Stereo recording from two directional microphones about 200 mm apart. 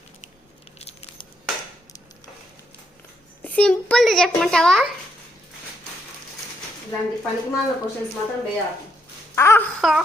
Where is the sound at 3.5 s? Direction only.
5° left (ahead or behind).